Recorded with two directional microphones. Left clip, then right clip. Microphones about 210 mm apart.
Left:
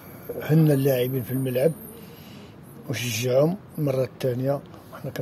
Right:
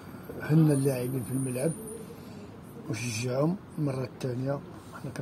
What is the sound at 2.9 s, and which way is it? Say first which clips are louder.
Speech: left 9 dB; 50° left (ahead or behind).